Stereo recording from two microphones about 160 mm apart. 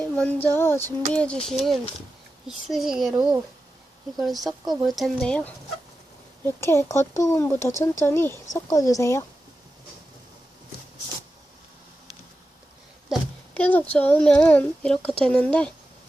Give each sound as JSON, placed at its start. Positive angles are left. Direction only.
{"t": 0.0, "sound": "speech", "side_deg": 5}
{"t": 4.2, "sound": "speech", "side_deg": 0}
{"t": 13.1, "sound": "a child's voice", "side_deg": 10}